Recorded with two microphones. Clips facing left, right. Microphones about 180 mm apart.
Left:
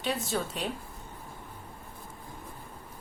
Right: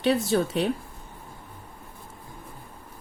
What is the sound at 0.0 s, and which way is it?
Speech, 70° right (ahead or behind).